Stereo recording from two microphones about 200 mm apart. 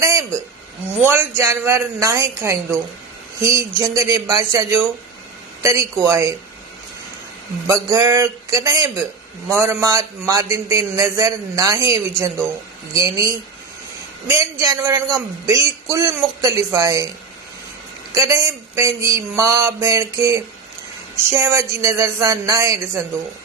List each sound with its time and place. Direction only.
0.0 s a sound: 15° right (ahead or behind)
1.0 s a man's voice: 15° right (ahead or behind)
6.1 s a man's voice: 15° right (ahead or behind)
7.7 s a man's voice: 15° right (ahead or behind)
18.1 s a man's voice: 15° right (ahead or behind)